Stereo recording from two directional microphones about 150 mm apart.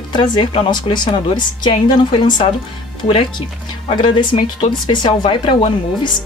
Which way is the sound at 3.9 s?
35° left (ahead or behind).